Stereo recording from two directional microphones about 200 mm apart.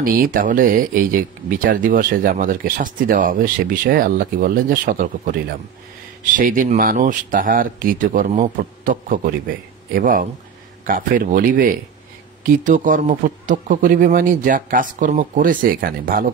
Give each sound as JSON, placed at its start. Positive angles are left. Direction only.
{"t": 0.0, "sound": "speech", "side_deg": -45}